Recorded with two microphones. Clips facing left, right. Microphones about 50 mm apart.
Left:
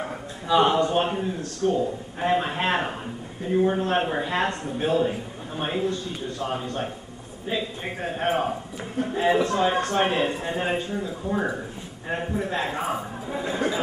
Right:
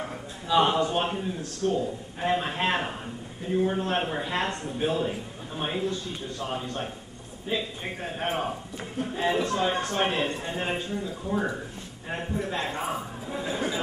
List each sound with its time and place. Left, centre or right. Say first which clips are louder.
0.0 s a man's voice: left 3 dB; centre